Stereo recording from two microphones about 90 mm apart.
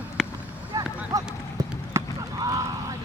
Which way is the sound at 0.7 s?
40° right (ahead or behind).